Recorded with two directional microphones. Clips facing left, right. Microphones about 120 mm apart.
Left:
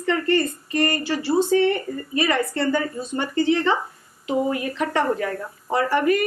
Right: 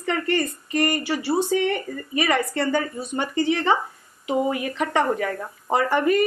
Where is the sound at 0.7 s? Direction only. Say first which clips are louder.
Even; 15° right (ahead or behind).